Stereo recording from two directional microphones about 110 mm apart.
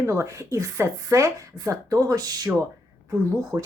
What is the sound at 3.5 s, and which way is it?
Speech, 20° right (ahead or behind).